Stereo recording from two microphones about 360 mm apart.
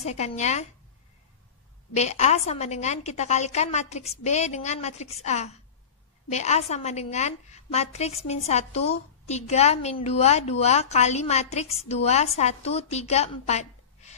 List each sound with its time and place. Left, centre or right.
0.0 s a woman's voice: centre
2.0 s a woman's voice: centre